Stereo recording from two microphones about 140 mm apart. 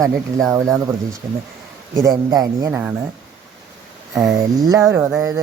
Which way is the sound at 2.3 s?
25° right (ahead or behind).